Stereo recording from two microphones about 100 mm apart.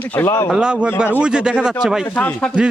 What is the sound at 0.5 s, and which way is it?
A man's voice, 10° right (ahead or behind).